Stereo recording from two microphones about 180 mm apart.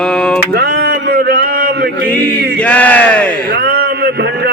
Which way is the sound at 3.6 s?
60° right (ahead or behind).